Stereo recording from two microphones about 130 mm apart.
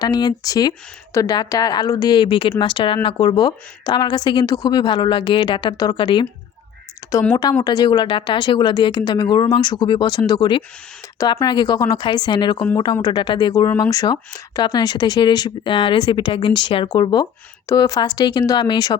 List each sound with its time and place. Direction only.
0.0 s speech: 30° left (ahead or behind)
7.0 s a sound: 25° left (ahead or behind)
7.6 s speech: 30° left (ahead or behind)